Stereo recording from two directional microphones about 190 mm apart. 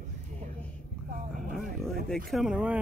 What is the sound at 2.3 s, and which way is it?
Speech, 5° right (ahead or behind).